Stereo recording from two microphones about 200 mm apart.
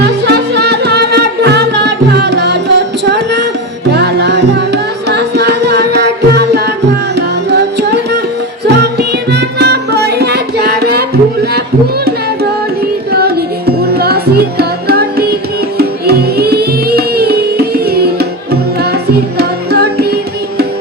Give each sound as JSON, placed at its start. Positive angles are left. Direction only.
{"t": 0.0, "sound": "music", "side_deg": -55}
{"t": 13.1, "sound": "music", "side_deg": -50}